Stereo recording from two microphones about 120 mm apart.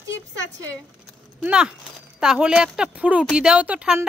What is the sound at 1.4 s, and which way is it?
A woman's voice, 5° right (ahead or behind).